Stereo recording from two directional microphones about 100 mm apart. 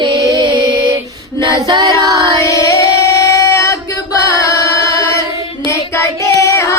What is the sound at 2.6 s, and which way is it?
Singing, 30° left (ahead or behind).